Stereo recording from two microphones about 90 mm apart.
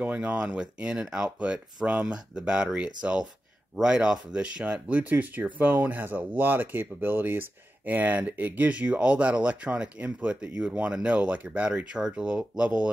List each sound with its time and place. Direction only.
0.0 s speech: 15° right (ahead or behind)